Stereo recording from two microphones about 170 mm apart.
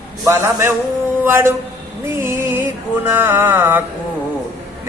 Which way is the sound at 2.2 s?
15° right (ahead or behind).